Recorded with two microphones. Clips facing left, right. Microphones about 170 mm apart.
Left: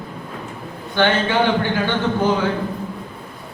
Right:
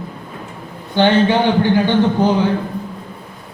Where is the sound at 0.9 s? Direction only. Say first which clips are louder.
Right 5 dB; 15° right (ahead or behind).